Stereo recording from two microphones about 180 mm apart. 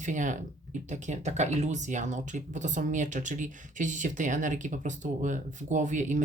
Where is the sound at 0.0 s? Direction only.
45° right (ahead or behind).